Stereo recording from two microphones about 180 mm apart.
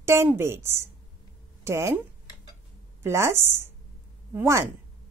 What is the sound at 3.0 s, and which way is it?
A woman's voice, 15° right (ahead or behind).